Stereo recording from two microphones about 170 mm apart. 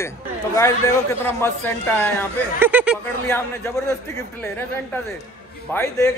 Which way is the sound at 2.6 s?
10° right (ahead or behind).